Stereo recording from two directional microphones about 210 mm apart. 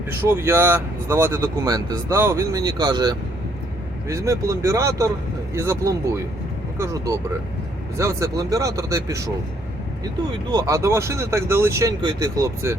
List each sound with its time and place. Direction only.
0.1 s speech: 10° right (ahead or behind)
10.5 s speech: 15° right (ahead or behind)